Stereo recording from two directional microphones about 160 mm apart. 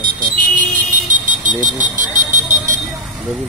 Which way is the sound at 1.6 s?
55° right (ahead or behind).